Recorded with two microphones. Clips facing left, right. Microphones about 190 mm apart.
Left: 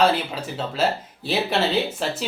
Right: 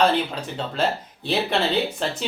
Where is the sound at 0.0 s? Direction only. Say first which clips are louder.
Even; 5° left (ahead or behind).